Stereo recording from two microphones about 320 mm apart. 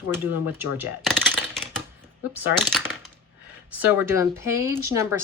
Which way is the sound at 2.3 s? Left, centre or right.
Centre.